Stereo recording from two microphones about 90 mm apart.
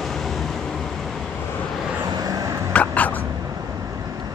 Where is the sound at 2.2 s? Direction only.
40° right (ahead or behind).